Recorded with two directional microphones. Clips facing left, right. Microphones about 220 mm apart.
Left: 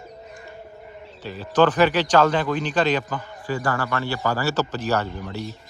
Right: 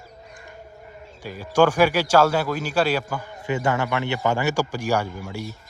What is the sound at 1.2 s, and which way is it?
Speech, 10° right (ahead or behind).